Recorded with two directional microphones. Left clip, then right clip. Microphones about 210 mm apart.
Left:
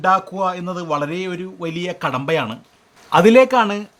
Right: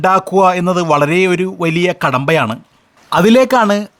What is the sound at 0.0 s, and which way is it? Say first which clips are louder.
Speech: right 7 dB; 45° right (ahead or behind).